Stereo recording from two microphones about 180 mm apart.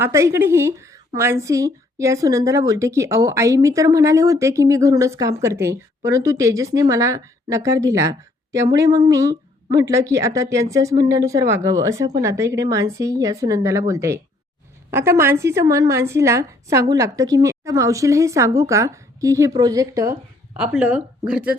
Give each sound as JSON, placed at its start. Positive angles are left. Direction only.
{"t": 0.0, "sound": "a woman's voice", "side_deg": -15}
{"t": 20.6, "sound": "a woman's voice", "side_deg": -5}